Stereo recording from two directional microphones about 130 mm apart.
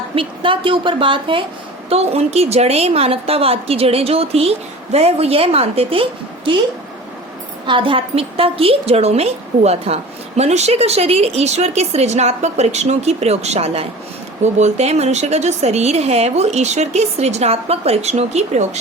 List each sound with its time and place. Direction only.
0.2 s a woman's voice: 40° right (ahead or behind)
1.9 s a woman's voice: 50° right (ahead or behind)
7.7 s a woman's voice: 40° right (ahead or behind); by 18.8 s 60° right (ahead or behind)